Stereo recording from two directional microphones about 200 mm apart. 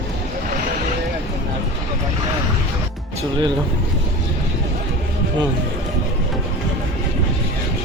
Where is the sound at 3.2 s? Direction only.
25° right (ahead or behind).